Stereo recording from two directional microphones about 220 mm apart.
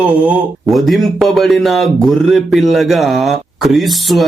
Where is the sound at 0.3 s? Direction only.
5° right (ahead or behind).